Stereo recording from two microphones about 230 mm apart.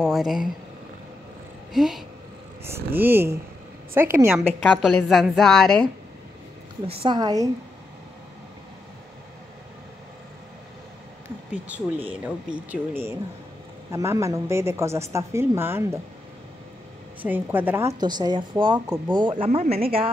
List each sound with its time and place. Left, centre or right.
0.0 s a woman's voice: centre
1.7 s a woman's voice: centre
4.6 s a woman's voice: centre
6.9 s speech: right
11.5 s a woman's voice: centre
17.2 s speech: centre; by 20.1 s right